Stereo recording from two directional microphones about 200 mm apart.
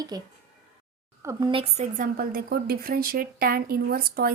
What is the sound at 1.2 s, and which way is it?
Speech, 15° right (ahead or behind).